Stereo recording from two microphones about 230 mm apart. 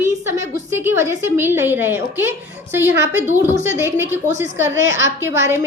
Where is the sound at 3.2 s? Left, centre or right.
Right.